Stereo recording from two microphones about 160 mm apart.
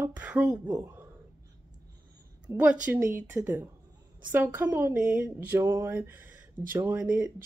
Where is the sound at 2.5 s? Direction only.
10° right (ahead or behind).